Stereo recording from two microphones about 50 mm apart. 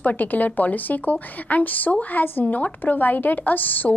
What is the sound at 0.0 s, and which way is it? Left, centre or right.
A woman's voice, left.